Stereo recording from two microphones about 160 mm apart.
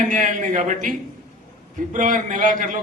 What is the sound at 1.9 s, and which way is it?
Speech, 55° right (ahead or behind).